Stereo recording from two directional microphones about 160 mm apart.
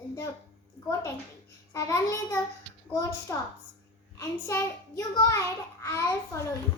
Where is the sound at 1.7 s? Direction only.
20° left (ahead or behind).